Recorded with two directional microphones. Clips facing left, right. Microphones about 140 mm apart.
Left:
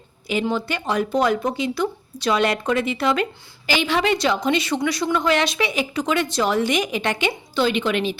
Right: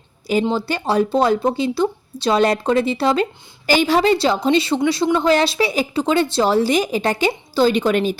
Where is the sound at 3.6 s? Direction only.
40° right (ahead or behind).